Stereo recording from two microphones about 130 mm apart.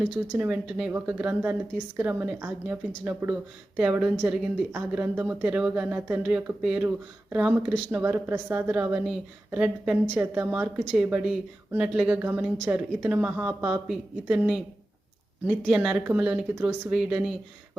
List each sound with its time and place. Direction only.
0.3 s a woman's voice: 10° right (ahead or behind)
6.8 s a woman's voice: 15° right (ahead or behind)
10.9 s a woman's voice: 5° right (ahead or behind)